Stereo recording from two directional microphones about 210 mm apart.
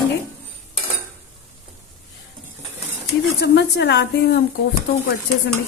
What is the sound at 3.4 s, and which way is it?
A woman's voice, 55° left (ahead or behind).